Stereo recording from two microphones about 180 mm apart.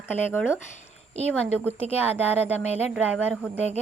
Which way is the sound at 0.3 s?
10° left (ahead or behind).